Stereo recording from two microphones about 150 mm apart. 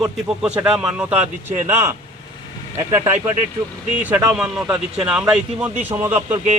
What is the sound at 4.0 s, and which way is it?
Speech, 10° right (ahead or behind).